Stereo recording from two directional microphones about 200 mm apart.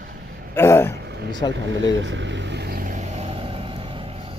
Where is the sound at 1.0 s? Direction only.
55° right (ahead or behind); by 4.4 s 30° right (ahead or behind).